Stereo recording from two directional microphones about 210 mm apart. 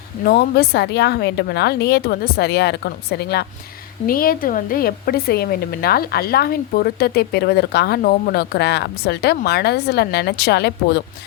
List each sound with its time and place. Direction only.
0.3 s a woman's voice: 50° left (ahead or behind)